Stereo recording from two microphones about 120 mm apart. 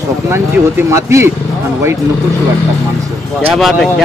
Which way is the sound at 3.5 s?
Centre (ahead or behind).